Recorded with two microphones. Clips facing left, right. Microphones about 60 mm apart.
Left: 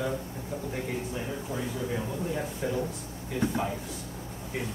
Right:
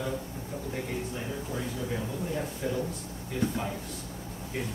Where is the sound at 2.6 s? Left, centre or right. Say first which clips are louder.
Left 1 dB; centre.